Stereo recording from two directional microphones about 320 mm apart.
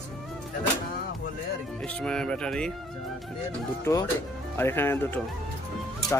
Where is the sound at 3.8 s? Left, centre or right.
Centre.